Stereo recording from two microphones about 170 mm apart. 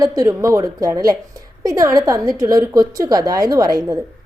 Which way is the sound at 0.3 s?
20° right (ahead or behind).